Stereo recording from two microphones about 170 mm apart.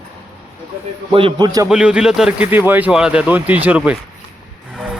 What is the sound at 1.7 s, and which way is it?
Speech, 5° right (ahead or behind).